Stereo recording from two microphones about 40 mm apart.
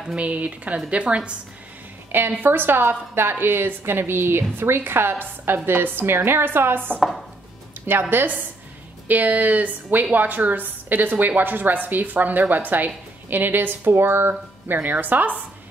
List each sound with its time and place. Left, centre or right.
0.1 s a woman's voice: right
2.4 s a woman's voice: right
13.9 s a woman's voice: right
14.7 s a woman's voice: right